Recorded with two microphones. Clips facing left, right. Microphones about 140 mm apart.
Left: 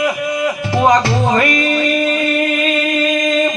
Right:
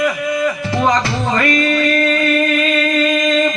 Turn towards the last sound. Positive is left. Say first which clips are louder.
# even
turn(degrees=15)  # may be behind; listen again after turning